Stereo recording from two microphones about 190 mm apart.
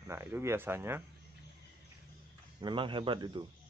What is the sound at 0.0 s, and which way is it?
Speech, 15° right (ahead or behind).